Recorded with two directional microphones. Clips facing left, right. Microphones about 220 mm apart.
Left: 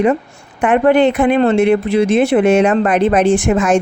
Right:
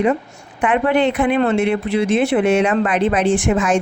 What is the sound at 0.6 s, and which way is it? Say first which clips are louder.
Speech: left 5 dB; 45° left (ahead or behind).